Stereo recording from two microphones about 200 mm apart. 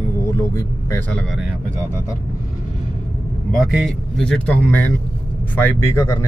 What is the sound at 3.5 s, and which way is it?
A man's voice, centre (ahead or behind).